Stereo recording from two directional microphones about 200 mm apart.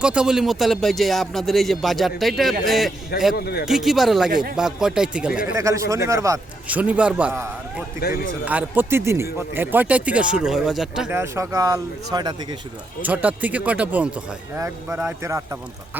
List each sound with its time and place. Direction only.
0.0 s a man's voice: 5° right (ahead or behind)
3.3 s a man's voice: 50° left (ahead or behind)
3.7 s a man's voice: centre (ahead or behind)
8.0 s a man's voice: 50° left (ahead or behind)
8.4 s speech: 10° right (ahead or behind)
13.0 s speech: 10° right (ahead or behind)